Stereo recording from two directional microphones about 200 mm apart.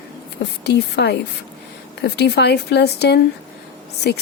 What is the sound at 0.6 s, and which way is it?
A woman's voice, 55° left (ahead or behind).